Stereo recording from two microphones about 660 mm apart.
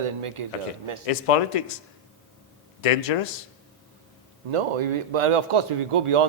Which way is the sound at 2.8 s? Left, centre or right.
Left.